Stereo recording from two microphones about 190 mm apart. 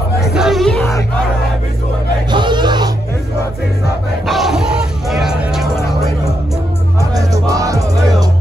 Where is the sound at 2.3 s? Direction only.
25° right (ahead or behind).